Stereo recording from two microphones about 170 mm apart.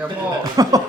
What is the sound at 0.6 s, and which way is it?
Speech, 25° right (ahead or behind).